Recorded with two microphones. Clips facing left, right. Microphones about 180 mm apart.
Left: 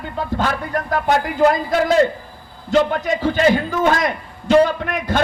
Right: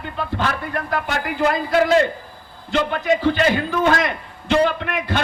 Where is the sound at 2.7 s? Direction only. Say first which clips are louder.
Left 2 dB; 45° left (ahead or behind).